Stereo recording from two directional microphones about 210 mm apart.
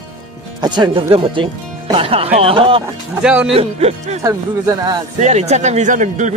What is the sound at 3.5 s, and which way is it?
Speech, 30° right (ahead or behind).